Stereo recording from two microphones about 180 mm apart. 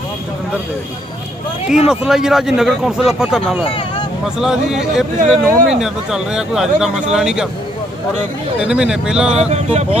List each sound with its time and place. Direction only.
1.9 s speech: 5° right (ahead or behind)
3.6 s a sound: 30° left (ahead or behind)
4.4 s speech: centre (ahead or behind)
8.5 s speech: 5° right (ahead or behind)
9.3 s speech: 40° right (ahead or behind)